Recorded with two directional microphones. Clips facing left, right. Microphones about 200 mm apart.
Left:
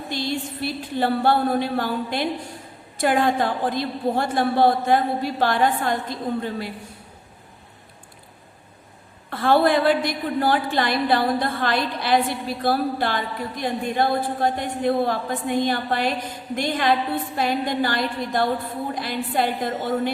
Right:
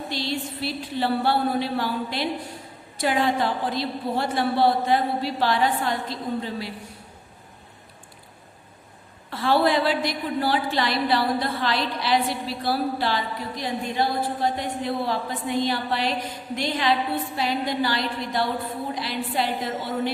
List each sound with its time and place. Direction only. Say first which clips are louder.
0.1 s a woman's voice: left 4 dB; 50° left (ahead or behind)
9.3 s a woman's voice: left 3 dB; 55° left (ahead or behind)